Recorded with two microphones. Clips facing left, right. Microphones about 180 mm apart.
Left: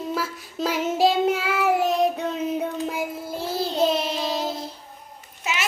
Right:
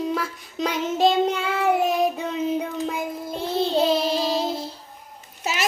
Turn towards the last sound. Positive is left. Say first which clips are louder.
# right 2 dB
turn(degrees=-35)  # may be behind; listen again after turning